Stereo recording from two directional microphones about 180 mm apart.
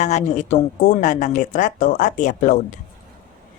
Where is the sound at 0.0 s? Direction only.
40° left (ahead or behind).